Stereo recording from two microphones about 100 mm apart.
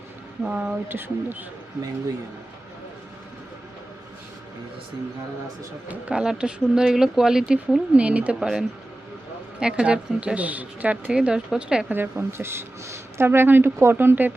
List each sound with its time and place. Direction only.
0.4 s speech: 10° right (ahead or behind)
0.9 s speech: 20° right (ahead or behind)
5.9 s speech: 10° right (ahead or behind)
11.9 s speech: 20° right (ahead or behind)